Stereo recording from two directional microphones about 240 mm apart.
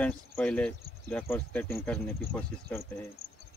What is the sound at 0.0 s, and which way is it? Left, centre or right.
Speech, centre.